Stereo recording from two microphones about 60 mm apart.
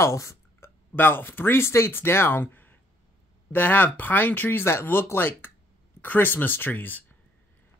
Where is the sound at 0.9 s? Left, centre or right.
Left.